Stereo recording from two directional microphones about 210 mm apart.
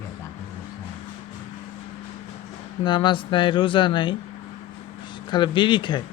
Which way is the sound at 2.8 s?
25° left (ahead or behind).